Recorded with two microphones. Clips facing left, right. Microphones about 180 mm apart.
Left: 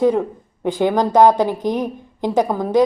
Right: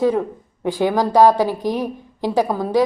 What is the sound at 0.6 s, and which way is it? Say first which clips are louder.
A woman's voice: left 1 dB; 20° left (ahead or behind).